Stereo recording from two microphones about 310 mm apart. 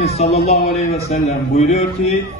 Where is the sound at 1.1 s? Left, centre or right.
Left.